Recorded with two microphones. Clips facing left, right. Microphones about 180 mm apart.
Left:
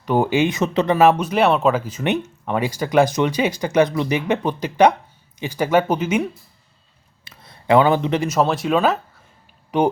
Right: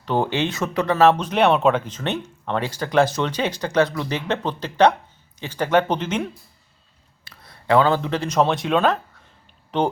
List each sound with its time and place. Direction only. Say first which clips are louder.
0.0 s speech: left 4 dB; 10° left (ahead or behind)
7.3 s a sound: left 3 dB; 20° left (ahead or behind)
8.3 s speech: right 1 dB; centre (ahead or behind)